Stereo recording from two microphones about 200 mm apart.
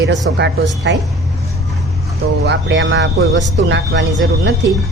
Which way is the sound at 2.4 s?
60° right (ahead or behind).